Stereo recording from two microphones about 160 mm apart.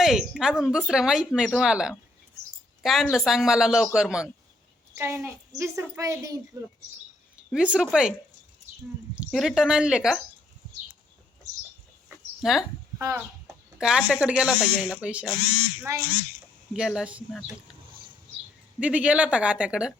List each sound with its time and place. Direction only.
0.0 s speech: 5° right (ahead or behind)
4.9 s a woman's voice: 15° right (ahead or behind)
7.5 s speech: 5° right (ahead or behind)
9.1 s speech: centre (ahead or behind)
12.4 s speech: centre (ahead or behind)
13.0 s speech: 20° right (ahead or behind)
13.7 s speech: 5° right (ahead or behind)
15.9 s speech: 20° right (ahead or behind)
16.7 s speech: 5° right (ahead or behind)
18.8 s a woman's voice: 10° right (ahead or behind)